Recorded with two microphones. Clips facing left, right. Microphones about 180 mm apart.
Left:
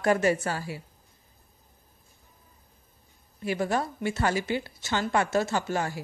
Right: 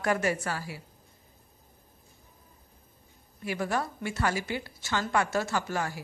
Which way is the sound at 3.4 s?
25° left (ahead or behind).